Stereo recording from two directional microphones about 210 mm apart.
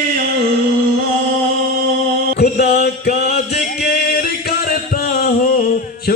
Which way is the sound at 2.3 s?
50° left (ahead or behind).